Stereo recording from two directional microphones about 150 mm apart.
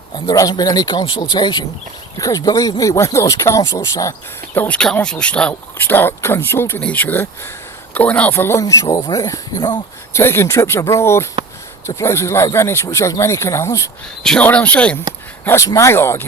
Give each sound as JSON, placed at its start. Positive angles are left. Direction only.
{"t": 0.3, "sound": "speech", "side_deg": 25}
{"t": 10.1, "sound": "speech", "side_deg": 15}
{"t": 14.3, "sound": "speech", "side_deg": 10}
{"t": 15.4, "sound": "speech", "side_deg": 20}